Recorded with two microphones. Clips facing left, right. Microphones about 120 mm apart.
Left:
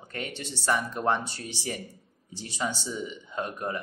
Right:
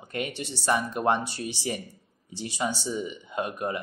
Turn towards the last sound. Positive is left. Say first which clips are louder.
# right 2 dB
turn(degrees=-15)  # may be behind; listen again after turning